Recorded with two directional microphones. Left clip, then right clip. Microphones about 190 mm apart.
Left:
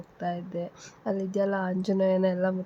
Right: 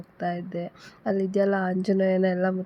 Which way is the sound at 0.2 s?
5° right (ahead or behind).